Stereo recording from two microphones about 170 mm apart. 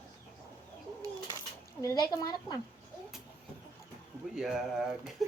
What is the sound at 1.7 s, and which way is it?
Speech, 20° left (ahead or behind).